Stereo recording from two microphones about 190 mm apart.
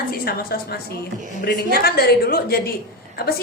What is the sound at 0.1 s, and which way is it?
A woman's voice, 50° left (ahead or behind).